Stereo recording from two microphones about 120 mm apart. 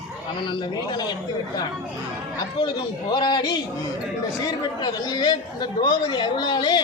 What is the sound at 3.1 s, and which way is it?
Speech, 40° left (ahead or behind).